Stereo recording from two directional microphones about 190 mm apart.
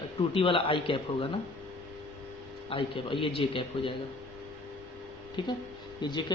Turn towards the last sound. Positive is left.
turn(degrees=25)  # may be behind; listen again after turning